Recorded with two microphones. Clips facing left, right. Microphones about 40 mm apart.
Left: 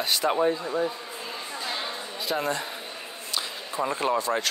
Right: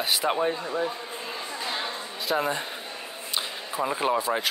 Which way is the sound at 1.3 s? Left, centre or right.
Centre.